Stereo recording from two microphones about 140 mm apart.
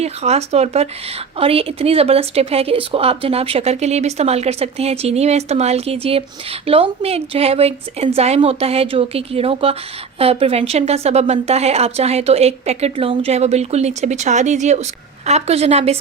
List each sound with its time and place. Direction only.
0.0 s speech: 50° right (ahead or behind)